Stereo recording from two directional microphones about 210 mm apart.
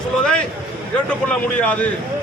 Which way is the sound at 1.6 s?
5° left (ahead or behind).